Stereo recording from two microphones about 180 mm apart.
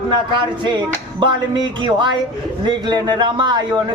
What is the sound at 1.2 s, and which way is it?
A man's voice, 25° right (ahead or behind).